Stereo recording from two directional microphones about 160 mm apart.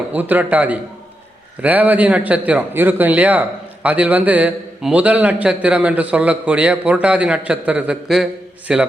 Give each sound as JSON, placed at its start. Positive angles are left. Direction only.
{"t": 0.1, "sound": "a man's voice", "side_deg": -10}